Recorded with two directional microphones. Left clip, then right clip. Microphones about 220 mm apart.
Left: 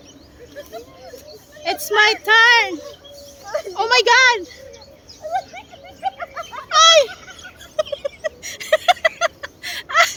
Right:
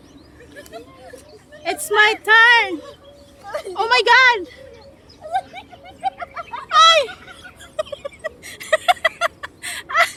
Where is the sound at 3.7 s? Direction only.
5° right (ahead or behind).